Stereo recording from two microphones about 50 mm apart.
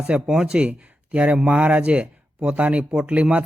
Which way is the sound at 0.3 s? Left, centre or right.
Centre.